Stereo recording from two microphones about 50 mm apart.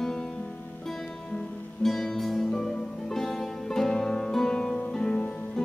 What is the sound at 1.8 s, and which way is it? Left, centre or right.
Music, centre.